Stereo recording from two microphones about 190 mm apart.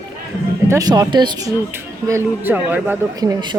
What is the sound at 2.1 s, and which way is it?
Speech, 10° right (ahead or behind).